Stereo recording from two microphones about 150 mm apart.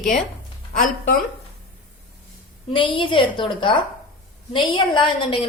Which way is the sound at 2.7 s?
35° left (ahead or behind).